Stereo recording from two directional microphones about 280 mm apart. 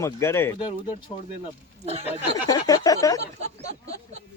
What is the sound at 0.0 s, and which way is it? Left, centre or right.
Speech, centre.